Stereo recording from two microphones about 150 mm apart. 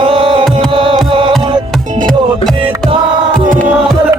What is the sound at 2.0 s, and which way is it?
Music, centre (ahead or behind).